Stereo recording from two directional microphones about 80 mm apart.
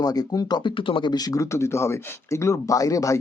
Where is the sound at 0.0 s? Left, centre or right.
Left.